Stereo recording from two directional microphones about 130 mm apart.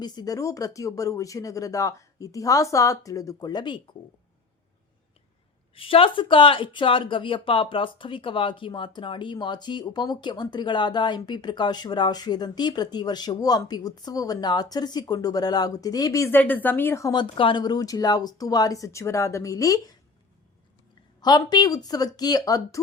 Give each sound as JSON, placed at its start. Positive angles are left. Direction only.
{"t": 0.0, "sound": "speech", "side_deg": 30}
{"t": 5.7, "sound": "speech", "side_deg": 45}
{"t": 16.4, "sound": "speech", "side_deg": 15}
{"t": 17.1, "sound": "speech", "side_deg": 40}
{"t": 21.2, "sound": "speech", "side_deg": 30}